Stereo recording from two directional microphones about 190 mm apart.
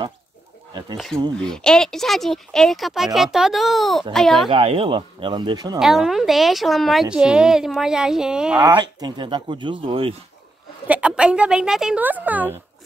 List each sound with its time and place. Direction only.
0.9 s speech: centre (ahead or behind)
4.5 s speech: 30° right (ahead or behind)
5.8 s speech: centre (ahead or behind)
8.5 s speech: 20° right (ahead or behind)
10.9 s speech: 5° right (ahead or behind)